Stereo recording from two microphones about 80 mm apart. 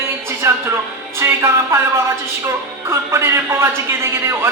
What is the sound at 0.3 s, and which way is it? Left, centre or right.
Music, right.